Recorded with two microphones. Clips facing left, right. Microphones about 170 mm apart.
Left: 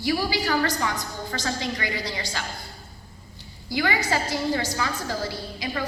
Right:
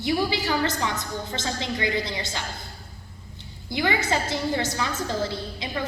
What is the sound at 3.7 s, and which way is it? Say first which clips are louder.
A woman's voice: even; 20° right (ahead or behind).